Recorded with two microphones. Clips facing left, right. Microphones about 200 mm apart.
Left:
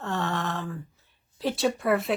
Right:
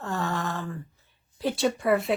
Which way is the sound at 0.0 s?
Centre (ahead or behind).